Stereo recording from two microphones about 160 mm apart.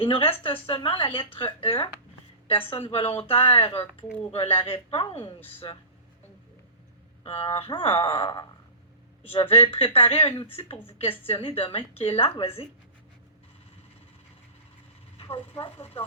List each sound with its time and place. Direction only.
0.0 s speech: 35° left (ahead or behind)
7.3 s speech: 35° left (ahead or behind)
15.2 s speech: 35° left (ahead or behind)